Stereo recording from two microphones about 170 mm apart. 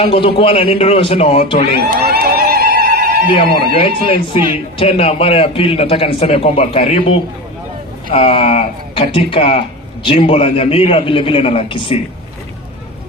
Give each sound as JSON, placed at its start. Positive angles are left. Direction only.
{"t": 0.0, "sound": "speech", "side_deg": 35}
{"t": 1.9, "sound": "a sound", "side_deg": -60}
{"t": 3.5, "sound": "speech", "side_deg": 30}
{"t": 8.1, "sound": "speech", "side_deg": 35}